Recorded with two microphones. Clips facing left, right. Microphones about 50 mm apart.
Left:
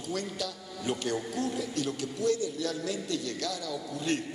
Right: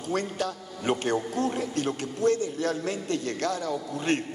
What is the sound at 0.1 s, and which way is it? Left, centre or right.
A man's voice, right.